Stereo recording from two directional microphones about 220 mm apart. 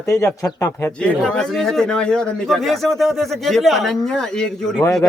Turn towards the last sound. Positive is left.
turn(degrees=5)  # may be behind; listen again after turning